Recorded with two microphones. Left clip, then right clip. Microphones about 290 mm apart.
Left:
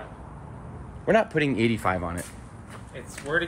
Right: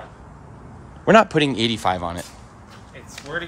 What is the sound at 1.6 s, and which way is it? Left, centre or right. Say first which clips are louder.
Speech: right 4 dB; centre.